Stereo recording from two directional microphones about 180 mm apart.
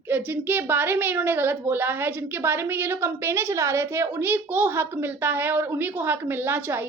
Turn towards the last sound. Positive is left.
turn(degrees=-10)  # may be behind; listen again after turning